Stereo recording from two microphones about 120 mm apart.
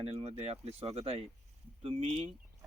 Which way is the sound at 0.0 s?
55° right (ahead or behind).